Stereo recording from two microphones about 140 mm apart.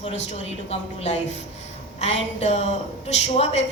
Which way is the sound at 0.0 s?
45° left (ahead or behind).